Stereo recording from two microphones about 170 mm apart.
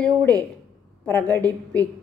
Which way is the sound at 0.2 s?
10° left (ahead or behind).